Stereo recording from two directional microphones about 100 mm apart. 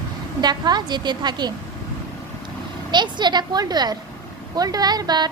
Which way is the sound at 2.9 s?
50° right (ahead or behind).